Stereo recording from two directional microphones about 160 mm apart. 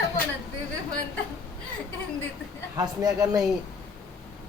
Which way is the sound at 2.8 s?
20° right (ahead or behind).